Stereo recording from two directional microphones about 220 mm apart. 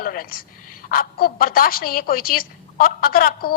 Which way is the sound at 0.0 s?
40° left (ahead or behind).